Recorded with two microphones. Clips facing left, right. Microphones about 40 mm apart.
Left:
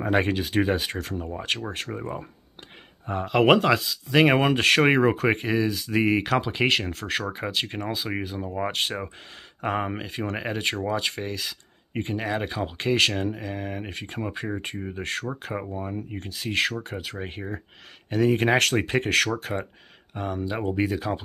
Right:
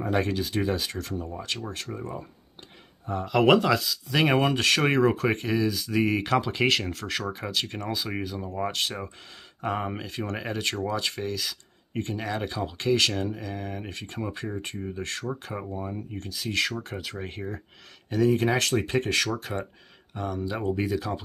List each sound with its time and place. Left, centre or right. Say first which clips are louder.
0.1 s speech: left 4 dB; left
1.1 s speech: left 2 dB; left
1.7 s speech: left 3 dB; left
3.3 s speech: left 1 dB; left
16.1 s speech: left 2 dB; left
16.7 s speech: left 2 dB; centre
18.1 s speech: left 2 dB; left